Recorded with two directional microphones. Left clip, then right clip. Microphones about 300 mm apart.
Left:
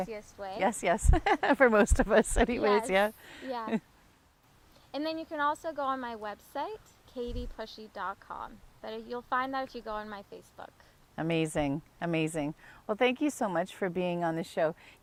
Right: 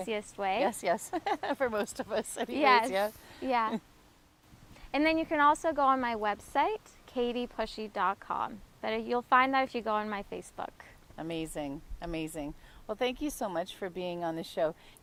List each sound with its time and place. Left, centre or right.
0.1 s a woman's voice: centre
0.6 s speech: left
2.6 s a woman's voice: centre
2.9 s a woman's voice: left
3.4 s a woman's voice: centre
4.9 s a woman's voice: centre
11.2 s a woman's voice: left